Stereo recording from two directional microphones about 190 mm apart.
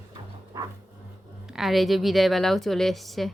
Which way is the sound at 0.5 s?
15° right (ahead or behind).